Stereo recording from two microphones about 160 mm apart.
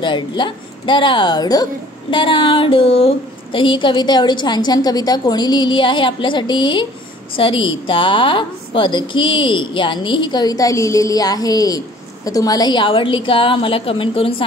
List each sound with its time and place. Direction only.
0.0 s a woman's voice: 30° left (ahead or behind)